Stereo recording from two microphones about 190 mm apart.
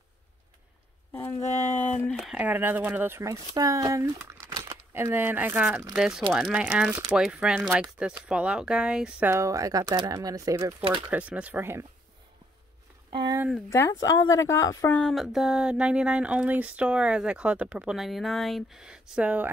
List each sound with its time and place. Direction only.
1.4 s speech: 40° left (ahead or behind)
1.9 s speech: 5° left (ahead or behind); by 11.0 s 20° right (ahead or behind)
11.1 s speech: 5° right (ahead or behind)
13.1 s speech: 25° right (ahead or behind)
13.7 s speech: 15° left (ahead or behind)
15.0 s speech: centre (ahead or behind)